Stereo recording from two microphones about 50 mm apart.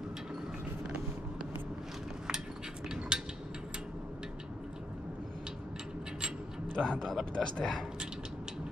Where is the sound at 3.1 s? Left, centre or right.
Centre.